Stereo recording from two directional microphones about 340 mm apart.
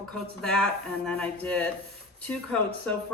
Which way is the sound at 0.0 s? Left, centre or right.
Centre.